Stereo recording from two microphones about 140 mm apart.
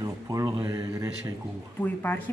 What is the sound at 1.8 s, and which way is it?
Speech, 10° left (ahead or behind).